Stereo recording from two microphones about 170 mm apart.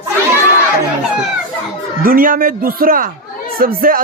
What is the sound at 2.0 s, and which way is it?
A man's voice, 55° right (ahead or behind).